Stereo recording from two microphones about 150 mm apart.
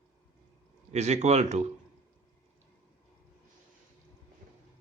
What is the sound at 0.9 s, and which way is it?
Speech, 50° right (ahead or behind).